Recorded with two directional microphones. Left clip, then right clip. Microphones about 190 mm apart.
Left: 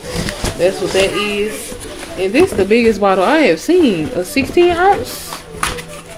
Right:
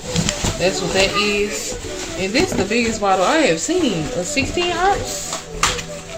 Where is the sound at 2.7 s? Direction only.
70° left (ahead or behind).